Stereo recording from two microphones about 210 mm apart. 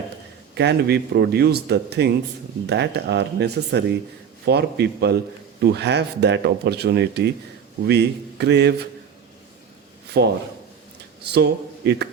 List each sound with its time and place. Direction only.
0.5 s speech: 55° right (ahead or behind)
10.2 s speech: 55° right (ahead or behind)